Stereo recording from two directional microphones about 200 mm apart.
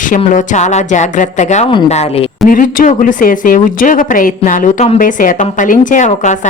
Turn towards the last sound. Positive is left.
turn(degrees=40)  # may be behind; listen again after turning